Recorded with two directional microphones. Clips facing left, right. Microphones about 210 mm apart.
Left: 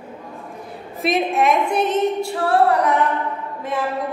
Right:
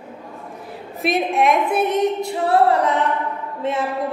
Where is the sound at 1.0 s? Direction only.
Centre (ahead or behind).